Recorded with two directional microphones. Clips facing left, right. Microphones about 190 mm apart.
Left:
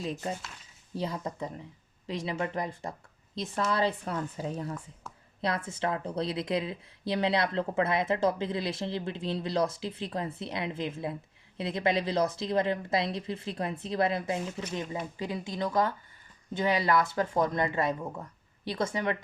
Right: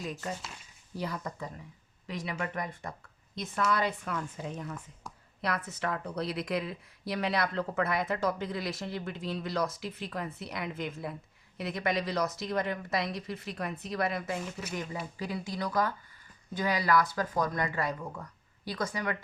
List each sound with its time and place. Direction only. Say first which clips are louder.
0.0 s speech: left 3 dB; 25° left (ahead or behind)